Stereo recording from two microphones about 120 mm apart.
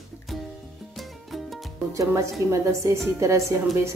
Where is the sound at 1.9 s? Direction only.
25° right (ahead or behind).